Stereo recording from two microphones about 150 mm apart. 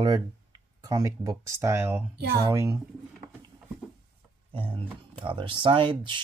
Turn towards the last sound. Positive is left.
turn(degrees=-35)  # may be behind; listen again after turning